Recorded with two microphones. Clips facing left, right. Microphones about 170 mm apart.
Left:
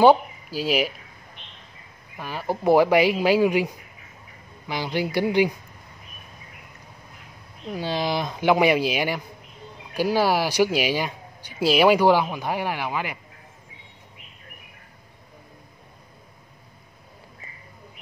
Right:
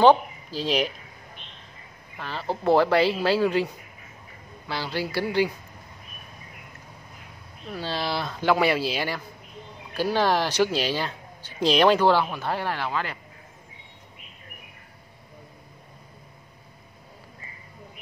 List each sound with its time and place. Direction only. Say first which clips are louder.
0.0 s speech: left 1 dB; 10° left (ahead or behind)
2.1 s speech: left 2 dB; 10° left (ahead or behind)
7.7 s speech: left 3 dB; 15° left (ahead or behind)